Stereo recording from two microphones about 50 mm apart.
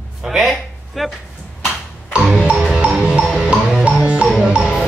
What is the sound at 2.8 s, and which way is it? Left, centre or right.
Music, right.